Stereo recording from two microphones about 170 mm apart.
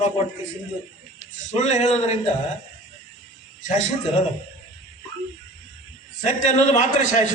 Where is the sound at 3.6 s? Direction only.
45° left (ahead or behind).